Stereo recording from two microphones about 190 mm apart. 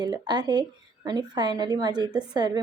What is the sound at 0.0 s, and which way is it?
A woman's voice, 20° right (ahead or behind).